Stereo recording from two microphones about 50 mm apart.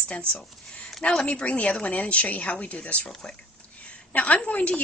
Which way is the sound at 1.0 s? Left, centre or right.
Left.